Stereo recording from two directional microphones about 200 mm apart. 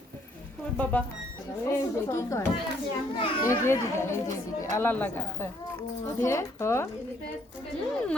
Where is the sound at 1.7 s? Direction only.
15° left (ahead or behind).